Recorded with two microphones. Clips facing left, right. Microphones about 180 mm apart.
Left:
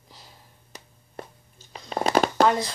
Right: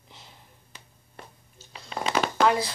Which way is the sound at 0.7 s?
40° left (ahead or behind).